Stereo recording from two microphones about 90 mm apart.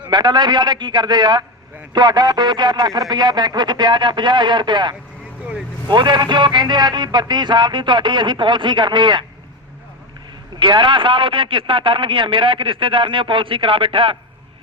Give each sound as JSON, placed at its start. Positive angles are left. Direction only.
{"t": 0.1, "sound": "speech", "side_deg": -55}
{"t": 10.6, "sound": "a man's voice", "side_deg": -65}